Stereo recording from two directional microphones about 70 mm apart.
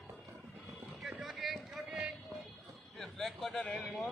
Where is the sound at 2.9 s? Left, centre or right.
Centre.